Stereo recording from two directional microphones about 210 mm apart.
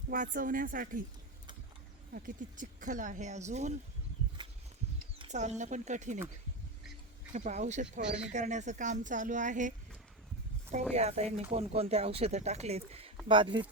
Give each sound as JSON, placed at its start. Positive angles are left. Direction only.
{"t": 0.1, "sound": "speech", "side_deg": -40}
{"t": 2.1, "sound": "speech", "side_deg": -40}
{"t": 5.2, "sound": "speech", "side_deg": -35}
{"t": 7.3, "sound": "speech", "side_deg": -35}
{"t": 10.9, "sound": "speech", "side_deg": -30}